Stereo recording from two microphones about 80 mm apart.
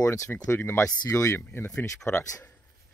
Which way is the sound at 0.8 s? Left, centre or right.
Left.